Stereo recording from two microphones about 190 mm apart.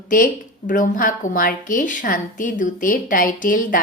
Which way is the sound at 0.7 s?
45° left (ahead or behind).